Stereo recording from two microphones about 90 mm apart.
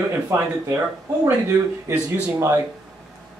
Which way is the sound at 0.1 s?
30° right (ahead or behind).